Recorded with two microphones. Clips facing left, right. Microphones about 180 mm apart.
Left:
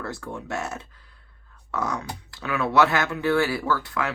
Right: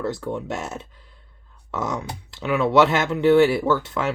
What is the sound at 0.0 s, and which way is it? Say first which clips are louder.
Speech: right 7 dB; 20° right (ahead or behind).